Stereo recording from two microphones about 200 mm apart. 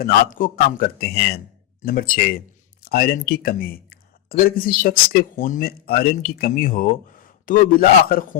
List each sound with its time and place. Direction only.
0.0 s a man's voice: 45° left (ahead or behind)